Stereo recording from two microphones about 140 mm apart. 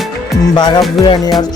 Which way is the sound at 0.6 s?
30° left (ahead or behind).